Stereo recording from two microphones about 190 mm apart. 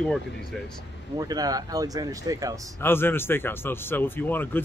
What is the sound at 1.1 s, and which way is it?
Speech, 20° right (ahead or behind).